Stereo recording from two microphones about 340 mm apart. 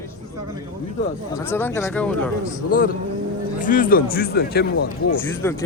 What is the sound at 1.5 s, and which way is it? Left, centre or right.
Speech, centre.